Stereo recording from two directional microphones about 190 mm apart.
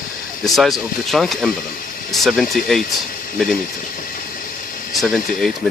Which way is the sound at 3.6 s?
45° left (ahead or behind).